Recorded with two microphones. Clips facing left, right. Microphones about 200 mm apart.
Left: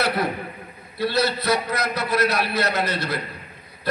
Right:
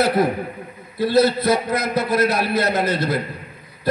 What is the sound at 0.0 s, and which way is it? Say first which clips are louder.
A man's voice: right 6 dB; 45° right (ahead or behind).